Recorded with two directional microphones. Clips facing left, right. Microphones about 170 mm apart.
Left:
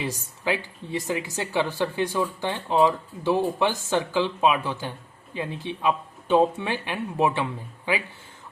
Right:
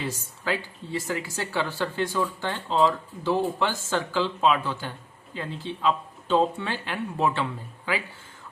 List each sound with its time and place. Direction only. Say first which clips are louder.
0.0 s speech: left 2 dB; 15° left (ahead or behind)